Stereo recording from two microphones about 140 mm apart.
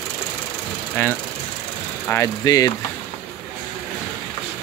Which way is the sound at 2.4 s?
25° left (ahead or behind).